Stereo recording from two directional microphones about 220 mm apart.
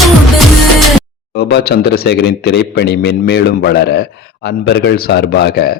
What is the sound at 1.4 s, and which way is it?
Speech, 45° left (ahead or behind).